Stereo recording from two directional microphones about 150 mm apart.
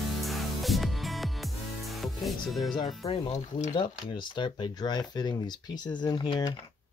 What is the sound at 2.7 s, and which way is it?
Speech, 30° left (ahead or behind).